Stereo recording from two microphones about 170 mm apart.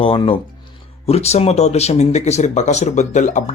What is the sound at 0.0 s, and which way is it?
Speech, 30° left (ahead or behind).